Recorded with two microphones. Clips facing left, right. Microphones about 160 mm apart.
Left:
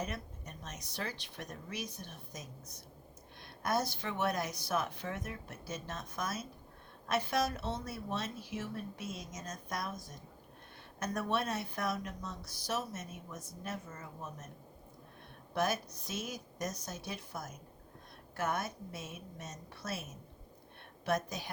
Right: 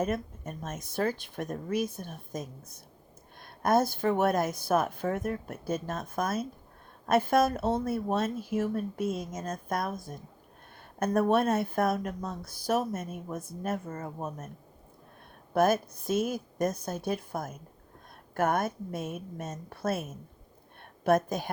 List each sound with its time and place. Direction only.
0.0 s speech: 50° right (ahead or behind)
15.5 s speech: 50° right (ahead or behind)